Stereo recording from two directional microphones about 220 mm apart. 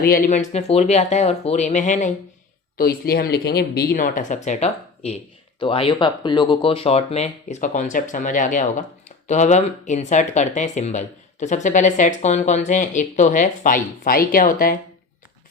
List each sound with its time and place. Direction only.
0.0 s speech: 40° left (ahead or behind)